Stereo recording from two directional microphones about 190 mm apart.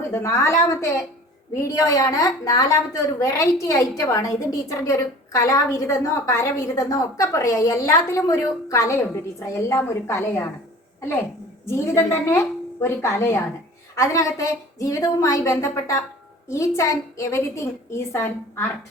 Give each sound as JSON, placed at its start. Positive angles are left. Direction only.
{"t": 0.1, "sound": "a woman's voice", "side_deg": 15}
{"t": 11.6, "sound": "a woman's voice", "side_deg": 15}